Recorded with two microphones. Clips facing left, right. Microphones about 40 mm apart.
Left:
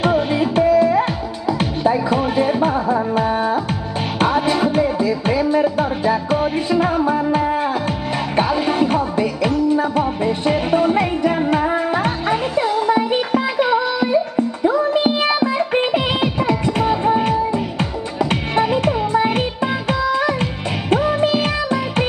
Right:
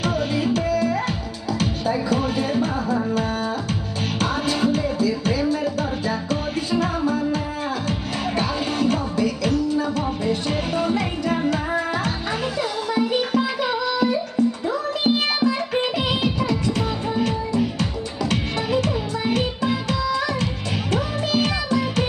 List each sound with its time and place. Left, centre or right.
0.0 s music: left